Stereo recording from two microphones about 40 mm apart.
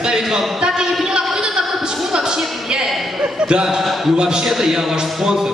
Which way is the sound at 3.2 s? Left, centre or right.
Right.